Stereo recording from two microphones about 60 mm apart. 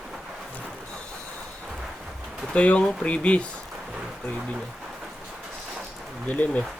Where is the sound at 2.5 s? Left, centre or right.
Left.